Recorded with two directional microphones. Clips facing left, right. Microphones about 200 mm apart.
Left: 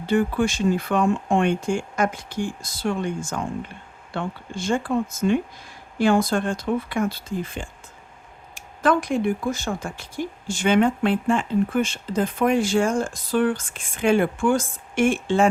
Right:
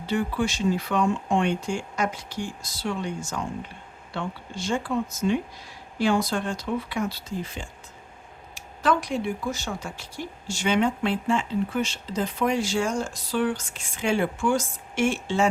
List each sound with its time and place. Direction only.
0.1 s speech: 50° left (ahead or behind)